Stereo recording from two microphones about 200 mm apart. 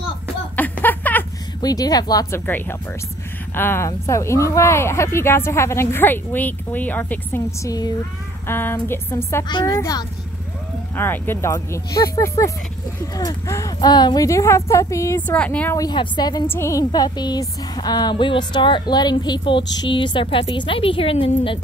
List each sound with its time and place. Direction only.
0.6 s a sound: 10° left (ahead or behind)
3.5 s speech: 10° left (ahead or behind)
15.8 s speech: 20° left (ahead or behind)